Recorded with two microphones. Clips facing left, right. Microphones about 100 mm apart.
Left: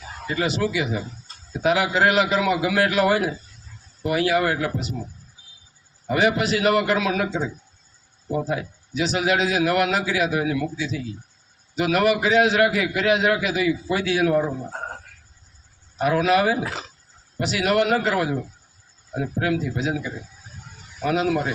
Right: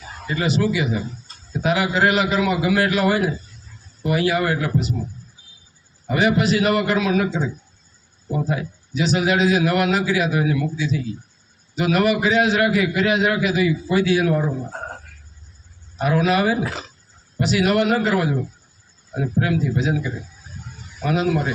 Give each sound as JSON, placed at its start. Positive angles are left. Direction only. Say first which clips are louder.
{"t": 0.3, "sound": "a man's voice", "louder": "right 3 dB", "side_deg": 85}
{"t": 6.1, "sound": "a man's voice", "louder": "right 2 dB", "side_deg": 90}
{"t": 8.4, "sound": "a man's voice", "louder": "right 1 dB", "side_deg": 85}
{"t": 10.3, "sound": "a man's voice", "louder": "right 2 dB", "side_deg": 80}
{"t": 16.0, "sound": "a man's voice", "louder": "even", "side_deg": 80}
{"t": 19.2, "sound": "speech", "louder": "right 2 dB", "side_deg": 90}